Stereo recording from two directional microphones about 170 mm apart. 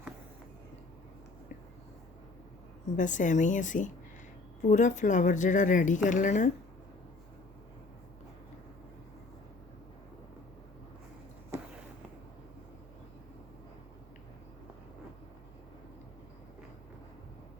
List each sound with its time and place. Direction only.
2.9 s speech: 45° left (ahead or behind)